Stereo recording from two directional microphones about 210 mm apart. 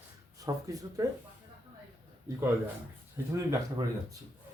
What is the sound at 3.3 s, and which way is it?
Speech, 15° right (ahead or behind).